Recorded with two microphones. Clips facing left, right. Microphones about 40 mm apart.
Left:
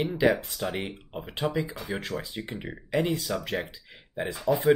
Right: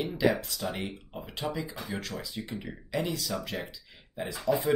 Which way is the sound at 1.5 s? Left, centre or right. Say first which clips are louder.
Left 4 dB; left.